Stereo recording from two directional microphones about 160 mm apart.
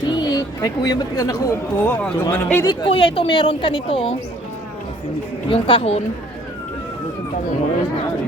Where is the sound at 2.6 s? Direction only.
30° left (ahead or behind).